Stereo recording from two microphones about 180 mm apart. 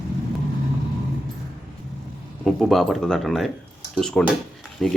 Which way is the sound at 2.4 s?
Centre (ahead or behind).